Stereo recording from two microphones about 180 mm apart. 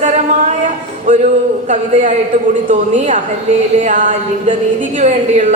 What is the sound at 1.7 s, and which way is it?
Speech, 45° right (ahead or behind).